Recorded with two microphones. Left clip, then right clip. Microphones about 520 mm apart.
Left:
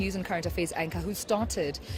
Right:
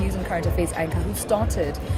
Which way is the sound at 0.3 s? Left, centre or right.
Left.